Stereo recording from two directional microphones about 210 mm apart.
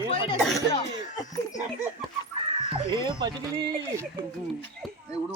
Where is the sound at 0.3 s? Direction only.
Centre (ahead or behind).